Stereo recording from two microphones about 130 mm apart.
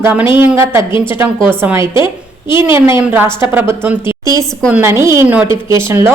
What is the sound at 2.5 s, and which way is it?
A woman's voice, 20° right (ahead or behind).